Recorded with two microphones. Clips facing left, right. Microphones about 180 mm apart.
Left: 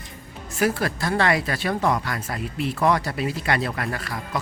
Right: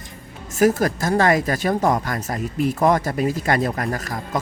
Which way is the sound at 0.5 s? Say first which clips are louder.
Right 6 dB; 45° right (ahead or behind).